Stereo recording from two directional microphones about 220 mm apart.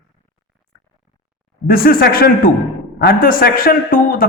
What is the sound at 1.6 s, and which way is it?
A man's voice, 40° left (ahead or behind).